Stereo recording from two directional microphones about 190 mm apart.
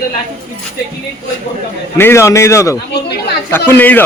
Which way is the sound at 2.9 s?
60° left (ahead or behind).